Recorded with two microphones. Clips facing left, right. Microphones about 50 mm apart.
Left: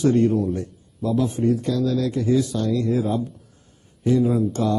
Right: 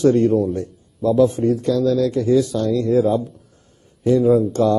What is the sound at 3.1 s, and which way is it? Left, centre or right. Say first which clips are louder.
Speech: right 4 dB; centre.